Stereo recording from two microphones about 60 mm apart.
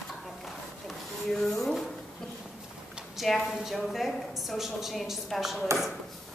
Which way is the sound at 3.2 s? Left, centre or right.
Centre.